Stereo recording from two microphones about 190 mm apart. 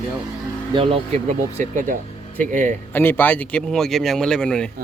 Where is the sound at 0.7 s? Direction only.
25° right (ahead or behind).